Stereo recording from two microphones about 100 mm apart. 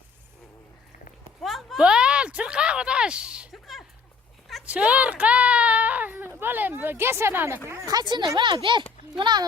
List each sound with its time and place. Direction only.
1.4 s a sound: centre (ahead or behind)
4.6 s a woman's voice: 15° right (ahead or behind); by 8.0 s 30° right (ahead or behind)
8.0 s speech: 50° right (ahead or behind)